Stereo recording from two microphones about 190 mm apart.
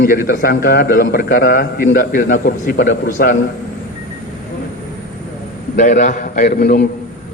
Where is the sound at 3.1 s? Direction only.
45° left (ahead or behind).